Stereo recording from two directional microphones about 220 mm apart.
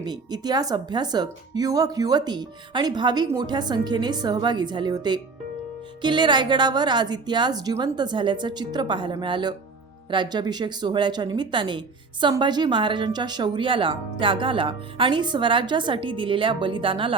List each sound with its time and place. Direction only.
0.0 s speech: 20° right (ahead or behind)